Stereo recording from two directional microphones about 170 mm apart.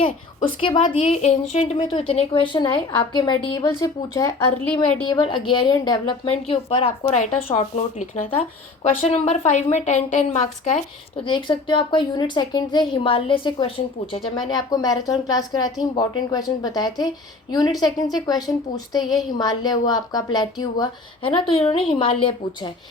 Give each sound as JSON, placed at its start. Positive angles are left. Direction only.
{"t": 0.0, "sound": "a woman's voice", "side_deg": 30}
{"t": 4.6, "sound": "a woman's voice", "side_deg": 5}
{"t": 5.0, "sound": "a woman's voice", "side_deg": 30}
{"t": 11.3, "sound": "speech", "side_deg": 30}
{"t": 21.6, "sound": "a woman's voice", "side_deg": 35}